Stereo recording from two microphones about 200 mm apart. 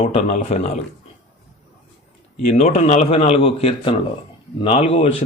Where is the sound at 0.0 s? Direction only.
35° left (ahead or behind).